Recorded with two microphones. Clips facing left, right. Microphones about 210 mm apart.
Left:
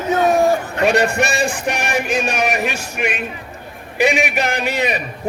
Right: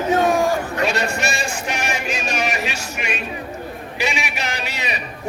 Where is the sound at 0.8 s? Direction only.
55° left (ahead or behind).